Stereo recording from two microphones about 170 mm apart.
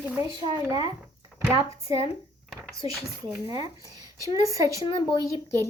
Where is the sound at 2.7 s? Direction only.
20° right (ahead or behind).